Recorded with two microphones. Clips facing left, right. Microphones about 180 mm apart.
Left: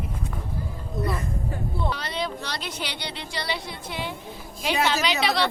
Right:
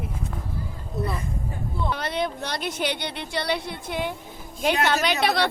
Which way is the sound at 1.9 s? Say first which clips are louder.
Right 3 dB; 55° right (ahead or behind).